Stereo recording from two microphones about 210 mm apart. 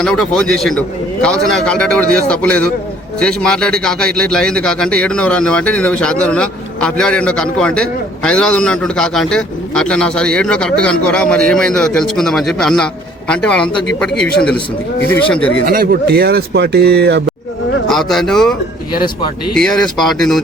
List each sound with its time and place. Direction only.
0.0 s a man's voice: 5° left (ahead or behind)
15.6 s speech: 45° right (ahead or behind)
17.8 s a man's voice: centre (ahead or behind)
19.5 s a man's voice: 5° left (ahead or behind)